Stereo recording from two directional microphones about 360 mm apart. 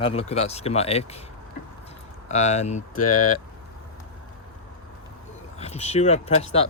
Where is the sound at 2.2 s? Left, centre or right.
Centre.